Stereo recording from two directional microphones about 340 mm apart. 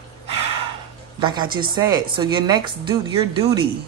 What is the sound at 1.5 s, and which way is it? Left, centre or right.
Speech, right.